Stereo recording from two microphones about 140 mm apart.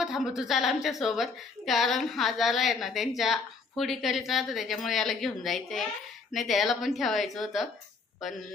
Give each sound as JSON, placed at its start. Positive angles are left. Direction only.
{"t": 0.0, "sound": "a woman's voice", "side_deg": 0}